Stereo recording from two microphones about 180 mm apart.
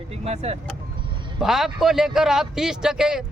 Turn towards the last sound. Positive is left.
turn(degrees=-5)  # may be behind; listen again after turning